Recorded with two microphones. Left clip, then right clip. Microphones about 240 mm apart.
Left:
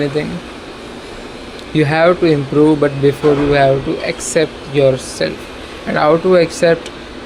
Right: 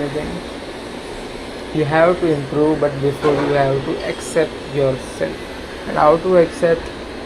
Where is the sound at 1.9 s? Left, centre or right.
Left.